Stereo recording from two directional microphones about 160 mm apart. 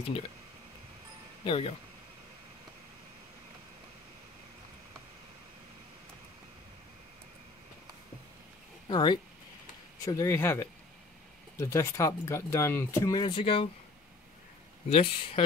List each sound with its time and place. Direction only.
1.4 s speech: 35° left (ahead or behind)
8.8 s speech: 30° left (ahead or behind)
14.9 s speech: 35° left (ahead or behind)